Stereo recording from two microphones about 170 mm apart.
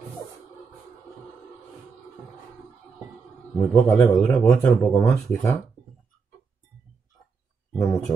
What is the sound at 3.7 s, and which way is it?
Speech, 20° left (ahead or behind).